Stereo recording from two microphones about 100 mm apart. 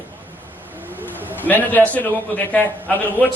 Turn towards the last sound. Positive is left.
turn(degrees=15)  # may be behind; listen again after turning